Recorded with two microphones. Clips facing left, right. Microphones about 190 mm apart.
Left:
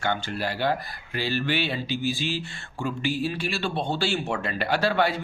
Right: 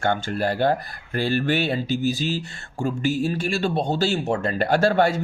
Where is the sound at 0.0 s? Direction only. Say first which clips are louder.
Right 5 dB; 50° right (ahead or behind).